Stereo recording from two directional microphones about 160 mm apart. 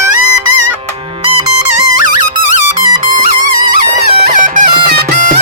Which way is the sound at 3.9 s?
50° right (ahead or behind).